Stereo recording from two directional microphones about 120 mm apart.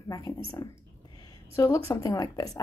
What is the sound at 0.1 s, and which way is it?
A woman's voice, 30° left (ahead or behind).